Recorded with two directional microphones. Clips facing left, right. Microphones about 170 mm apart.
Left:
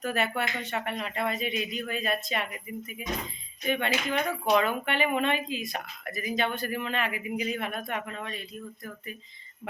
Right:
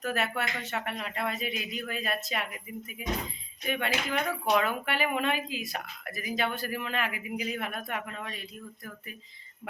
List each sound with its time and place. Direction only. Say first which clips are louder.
0.0 s speech: left 2 dB; centre (ahead or behind)